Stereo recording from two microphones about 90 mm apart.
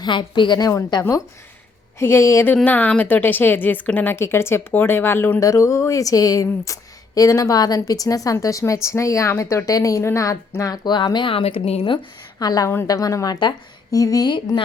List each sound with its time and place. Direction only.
0.0 s a woman's voice: 60° left (ahead or behind)
2.0 s a woman's voice: 30° left (ahead or behind)
2.6 s a woman's voice: 20° left (ahead or behind)
5.4 s speech: 35° left (ahead or behind)
10.6 s a woman's voice: 50° left (ahead or behind)
11.3 s speech: 85° left
12.4 s a woman's voice: 50° left (ahead or behind)